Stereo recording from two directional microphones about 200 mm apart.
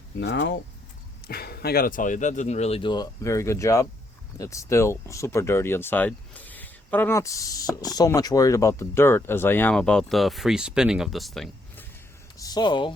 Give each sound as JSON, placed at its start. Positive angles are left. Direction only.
{"t": 0.2, "sound": "speech", "side_deg": 65}
{"t": 1.3, "sound": "speech", "side_deg": 50}
{"t": 12.4, "sound": "speech", "side_deg": 20}